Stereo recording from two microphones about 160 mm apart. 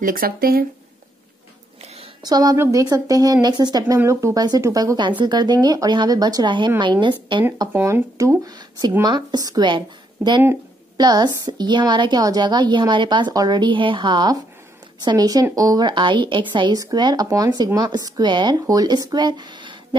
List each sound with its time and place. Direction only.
0.0 s speech: 65° right (ahead or behind)
2.2 s a woman's voice: 25° right (ahead or behind)
7.7 s a woman's voice: 15° right (ahead or behind)